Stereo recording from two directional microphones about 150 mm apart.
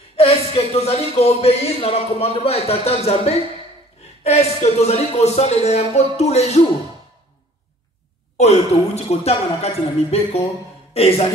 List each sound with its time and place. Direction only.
0.2 s speech: 40° left (ahead or behind)
8.4 s speech: 45° left (ahead or behind)